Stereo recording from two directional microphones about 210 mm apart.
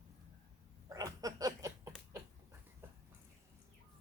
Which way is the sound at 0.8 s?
15° right (ahead or behind).